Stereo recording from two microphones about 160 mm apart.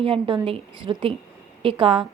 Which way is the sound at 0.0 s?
35° right (ahead or behind).